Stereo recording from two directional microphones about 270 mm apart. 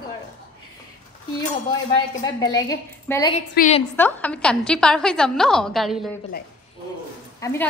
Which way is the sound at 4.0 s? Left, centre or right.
Centre.